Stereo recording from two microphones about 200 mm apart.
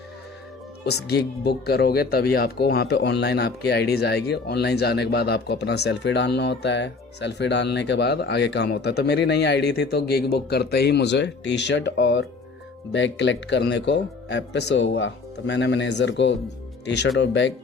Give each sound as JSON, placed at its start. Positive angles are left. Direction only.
{"t": 0.9, "sound": "speech", "side_deg": 55}